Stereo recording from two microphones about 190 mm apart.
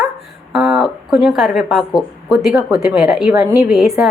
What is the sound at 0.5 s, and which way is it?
A woman's voice, 5° right (ahead or behind).